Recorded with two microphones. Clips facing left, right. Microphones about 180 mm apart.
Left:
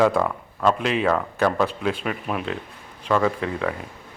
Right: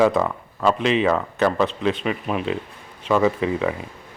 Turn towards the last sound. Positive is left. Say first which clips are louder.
# right 3 dB
turn(degrees=-5)  # may be behind; listen again after turning